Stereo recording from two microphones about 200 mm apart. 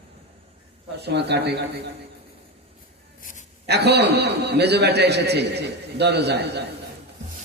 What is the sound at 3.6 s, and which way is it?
A man's voice, 55° right (ahead or behind).